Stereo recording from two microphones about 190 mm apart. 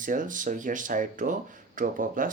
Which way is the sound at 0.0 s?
45° right (ahead or behind).